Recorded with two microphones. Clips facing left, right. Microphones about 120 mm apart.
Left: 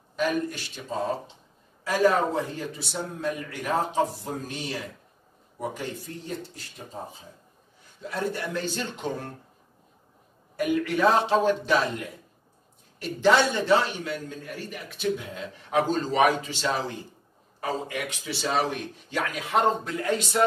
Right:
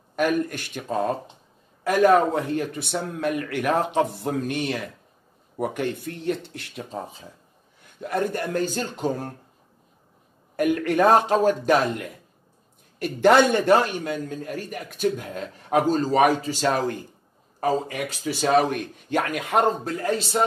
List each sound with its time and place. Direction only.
0.1 s speech: 55° right (ahead or behind); by 7.2 s 90° right
7.8 s a man's voice: 60° right (ahead or behind); by 9.3 s 40° right (ahead or behind)
10.5 s a man's voice: 55° right (ahead or behind)
13.0 s a man's voice: 55° right (ahead or behind)
18.2 s a man's voice: 50° right (ahead or behind)
19.8 s speech: 40° right (ahead or behind)